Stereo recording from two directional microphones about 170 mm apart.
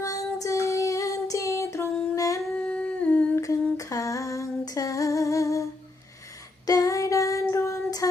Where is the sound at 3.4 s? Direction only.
20° left (ahead or behind).